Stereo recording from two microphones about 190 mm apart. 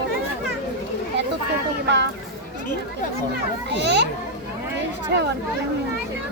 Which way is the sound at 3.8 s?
65° right (ahead or behind).